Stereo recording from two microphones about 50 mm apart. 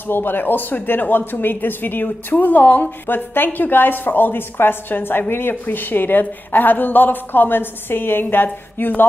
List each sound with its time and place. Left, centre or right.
0.0 s a woman's voice: left